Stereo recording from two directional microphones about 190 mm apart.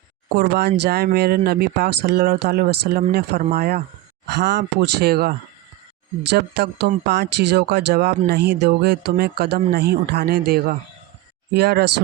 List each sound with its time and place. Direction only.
0.3 s speech: 50° right (ahead or behind)
6.3 s speech: 60° right (ahead or behind)